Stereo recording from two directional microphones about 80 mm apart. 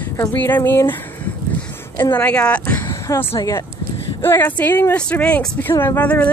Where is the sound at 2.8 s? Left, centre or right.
Left.